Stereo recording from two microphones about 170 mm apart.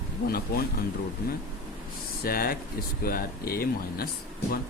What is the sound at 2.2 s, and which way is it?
A man's voice, 60° left (ahead or behind).